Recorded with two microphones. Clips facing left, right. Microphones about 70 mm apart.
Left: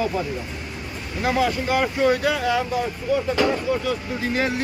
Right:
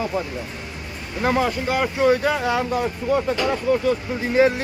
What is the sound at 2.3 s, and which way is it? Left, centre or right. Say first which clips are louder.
Speech: right 1 dB; right.